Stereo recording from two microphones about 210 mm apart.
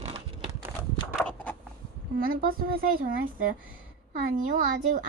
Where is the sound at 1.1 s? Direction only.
5° left (ahead or behind).